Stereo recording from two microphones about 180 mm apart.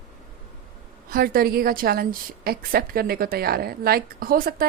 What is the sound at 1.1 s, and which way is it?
A woman's voice, 55° right (ahead or behind).